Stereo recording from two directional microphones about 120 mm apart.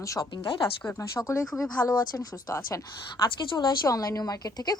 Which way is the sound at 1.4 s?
Centre (ahead or behind).